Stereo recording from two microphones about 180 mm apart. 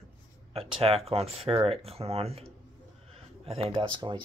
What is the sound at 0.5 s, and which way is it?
Speech, 30° right (ahead or behind).